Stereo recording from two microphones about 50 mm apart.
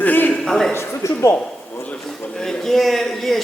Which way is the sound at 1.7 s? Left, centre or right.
Left.